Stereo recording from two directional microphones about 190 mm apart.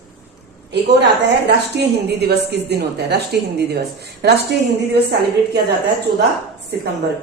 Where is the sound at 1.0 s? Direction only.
65° right (ahead or behind).